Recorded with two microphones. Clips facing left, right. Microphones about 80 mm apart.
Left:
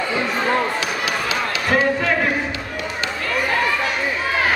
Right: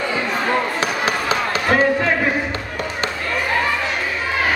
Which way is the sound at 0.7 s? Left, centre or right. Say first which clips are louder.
Right 2 dB; right.